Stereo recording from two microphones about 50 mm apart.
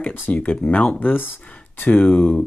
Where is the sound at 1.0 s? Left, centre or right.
Left.